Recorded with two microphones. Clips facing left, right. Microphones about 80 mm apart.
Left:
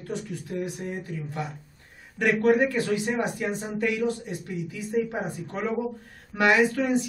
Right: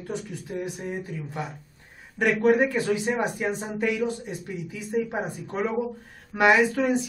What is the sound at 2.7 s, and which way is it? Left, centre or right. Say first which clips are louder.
Speech: right 1 dB; right.